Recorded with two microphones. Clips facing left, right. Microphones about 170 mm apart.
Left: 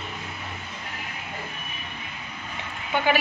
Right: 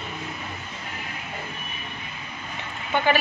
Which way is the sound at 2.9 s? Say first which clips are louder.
Right 1 dB; 10° left (ahead or behind).